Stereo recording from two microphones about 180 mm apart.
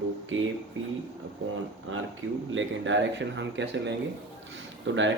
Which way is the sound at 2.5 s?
90° right.